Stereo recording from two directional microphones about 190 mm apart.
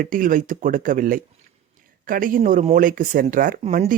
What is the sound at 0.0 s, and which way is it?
Speech, 45° right (ahead or behind).